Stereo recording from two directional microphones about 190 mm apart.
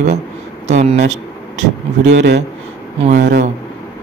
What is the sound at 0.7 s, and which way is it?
Speech, 35° right (ahead or behind).